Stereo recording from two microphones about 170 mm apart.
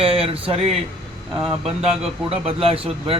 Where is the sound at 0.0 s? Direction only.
35° right (ahead or behind).